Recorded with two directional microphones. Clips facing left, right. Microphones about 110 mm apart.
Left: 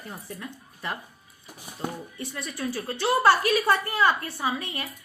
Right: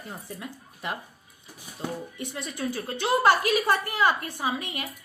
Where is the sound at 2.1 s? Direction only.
20° right (ahead or behind).